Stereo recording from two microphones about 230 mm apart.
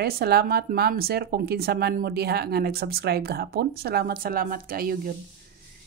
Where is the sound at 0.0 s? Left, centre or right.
Right.